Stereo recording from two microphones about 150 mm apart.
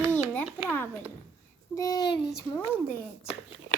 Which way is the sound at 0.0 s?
15° right (ahead or behind).